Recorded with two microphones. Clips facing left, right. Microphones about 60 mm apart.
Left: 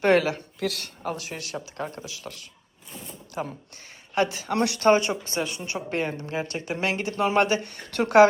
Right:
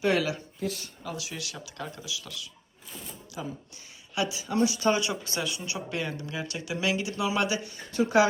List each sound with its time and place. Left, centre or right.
0.0 s speech: left
0.6 s speech: left
1.0 s a woman's voice: left
4.9 s a woman's voice: left